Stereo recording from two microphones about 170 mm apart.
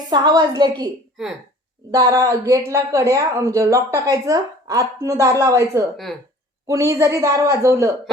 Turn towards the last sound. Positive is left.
turn(degrees=-20)  # may be behind; listen again after turning